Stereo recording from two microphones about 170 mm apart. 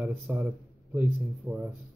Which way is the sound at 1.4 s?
Centre (ahead or behind).